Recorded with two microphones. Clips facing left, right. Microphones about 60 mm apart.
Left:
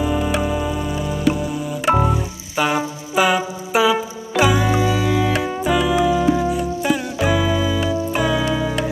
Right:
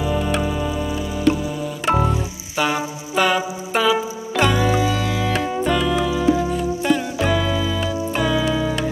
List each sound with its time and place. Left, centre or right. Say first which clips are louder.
0.0 s music: left 1 dB; centre